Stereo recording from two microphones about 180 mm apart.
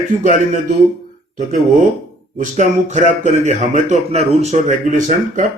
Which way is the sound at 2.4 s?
40° right (ahead or behind).